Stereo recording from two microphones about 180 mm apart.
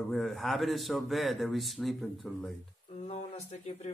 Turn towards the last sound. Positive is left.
turn(degrees=35)  # may be behind; listen again after turning